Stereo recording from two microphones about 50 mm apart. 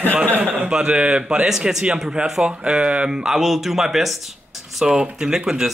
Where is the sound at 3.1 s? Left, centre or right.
Centre.